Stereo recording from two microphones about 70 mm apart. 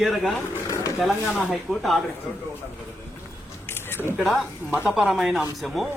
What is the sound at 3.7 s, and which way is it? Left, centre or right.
Single-lens reflex camera, left.